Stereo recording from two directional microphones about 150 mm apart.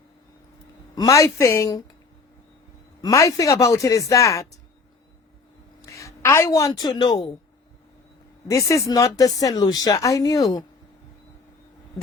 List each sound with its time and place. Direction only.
0.9 s speech: 20° left (ahead or behind)
3.0 s speech: 20° left (ahead or behind)
5.8 s a sound: 20° left (ahead or behind)
6.7 s speech: 30° left (ahead or behind)
8.4 s speech: 20° left (ahead or behind)